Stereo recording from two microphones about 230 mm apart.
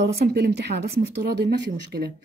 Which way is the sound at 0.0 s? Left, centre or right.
Right.